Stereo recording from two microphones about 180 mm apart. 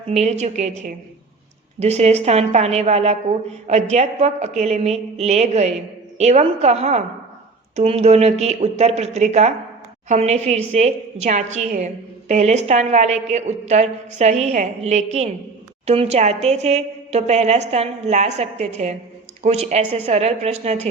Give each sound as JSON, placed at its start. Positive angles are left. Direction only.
{"t": 0.1, "sound": "a woman's voice", "side_deg": -40}